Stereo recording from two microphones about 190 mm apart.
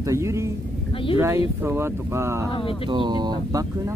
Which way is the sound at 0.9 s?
30° left (ahead or behind).